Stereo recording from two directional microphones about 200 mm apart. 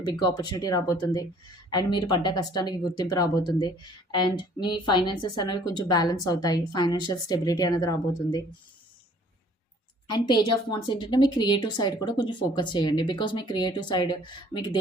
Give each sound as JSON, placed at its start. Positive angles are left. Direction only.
{"t": 0.0, "sound": "a woman's voice", "side_deg": 20}
{"t": 10.1, "sound": "a woman's voice", "side_deg": 20}